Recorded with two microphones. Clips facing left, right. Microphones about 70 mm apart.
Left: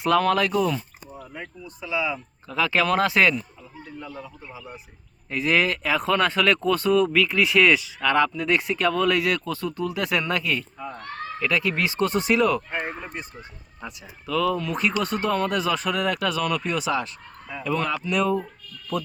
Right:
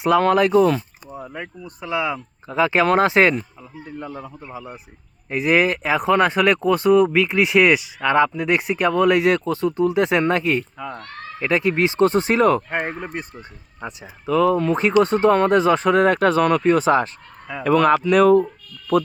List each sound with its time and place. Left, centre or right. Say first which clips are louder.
0.2 s speech: right 6 dB; right
1.2 s speech: right 5 dB; right
2.5 s speech: right 5 dB; right
3.9 s a man's voice: right 5 dB; right
5.3 s speech: right 4 dB; centre
10.8 s speech: right 4 dB; right
11.3 s speech: right 5 dB; right
12.7 s speech: right 5 dB; right
13.8 s speech: right 7 dB; right
17.5 s speech: right 10 dB; right